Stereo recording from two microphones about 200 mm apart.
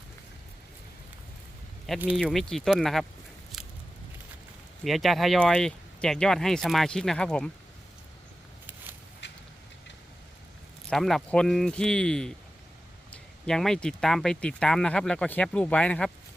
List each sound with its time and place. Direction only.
2.1 s speech: centre (ahead or behind)
3.5 s biting: centre (ahead or behind)
4.8 s speech: centre (ahead or behind)
8.6 s vehicle: 10° right (ahead or behind)
9.2 s a sound: 60° left (ahead or behind)
10.8 s speech: centre (ahead or behind)